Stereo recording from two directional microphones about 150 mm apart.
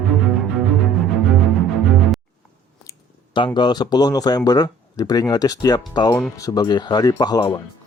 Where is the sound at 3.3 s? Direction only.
30° left (ahead or behind).